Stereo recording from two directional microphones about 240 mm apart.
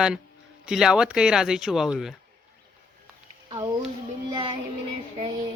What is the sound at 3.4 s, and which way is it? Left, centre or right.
Speech, right.